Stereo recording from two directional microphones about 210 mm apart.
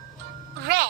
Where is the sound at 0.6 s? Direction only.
50° right (ahead or behind).